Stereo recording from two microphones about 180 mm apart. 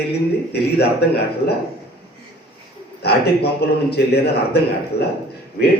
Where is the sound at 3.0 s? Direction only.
65° left (ahead or behind).